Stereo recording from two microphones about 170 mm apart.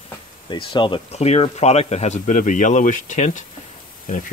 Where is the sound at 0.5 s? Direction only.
30° left (ahead or behind).